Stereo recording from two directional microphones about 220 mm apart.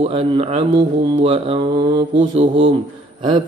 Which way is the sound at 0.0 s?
25° right (ahead or behind).